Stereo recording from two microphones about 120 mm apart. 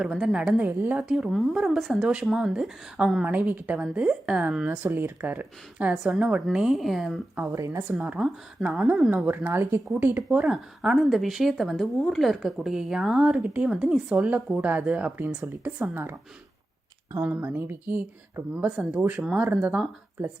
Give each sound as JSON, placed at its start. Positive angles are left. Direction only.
{"t": 0.0, "sound": "speech", "side_deg": -5}
{"t": 7.5, "sound": "a woman's voice", "side_deg": -25}
{"t": 7.8, "sound": "speech", "side_deg": -15}
{"t": 17.2, "sound": "speech", "side_deg": -15}